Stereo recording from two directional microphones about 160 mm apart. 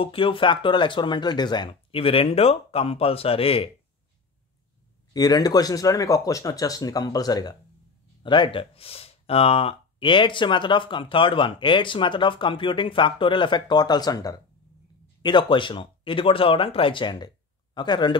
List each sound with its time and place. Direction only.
0.0 s speech: 35° left (ahead or behind)
5.1 s speech: 25° left (ahead or behind)